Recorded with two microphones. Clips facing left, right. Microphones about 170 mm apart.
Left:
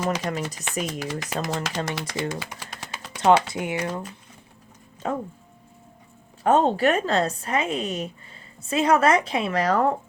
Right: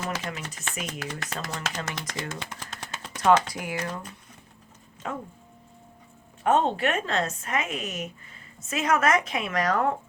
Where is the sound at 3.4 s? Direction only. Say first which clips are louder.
Left 5 dB; 25° left (ahead or behind).